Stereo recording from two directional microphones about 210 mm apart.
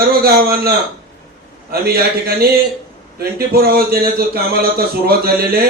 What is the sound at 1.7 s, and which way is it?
A man's voice, 45° right (ahead or behind).